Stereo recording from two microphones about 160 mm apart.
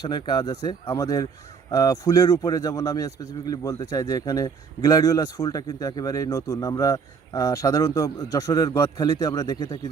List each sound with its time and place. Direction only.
0.0 s a man's voice: 25° left (ahead or behind)